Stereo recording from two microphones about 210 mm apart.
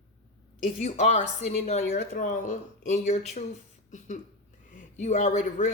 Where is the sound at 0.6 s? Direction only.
30° left (ahead or behind).